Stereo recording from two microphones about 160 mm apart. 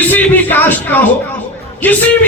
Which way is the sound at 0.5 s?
10° left (ahead or behind).